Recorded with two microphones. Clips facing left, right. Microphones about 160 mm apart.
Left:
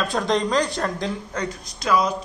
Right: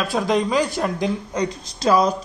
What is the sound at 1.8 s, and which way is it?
Speech, 35° right (ahead or behind).